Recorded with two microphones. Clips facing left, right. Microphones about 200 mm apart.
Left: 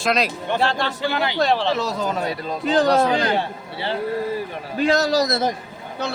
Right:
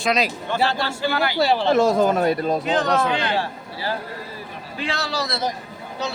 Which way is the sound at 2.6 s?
35° left (ahead or behind).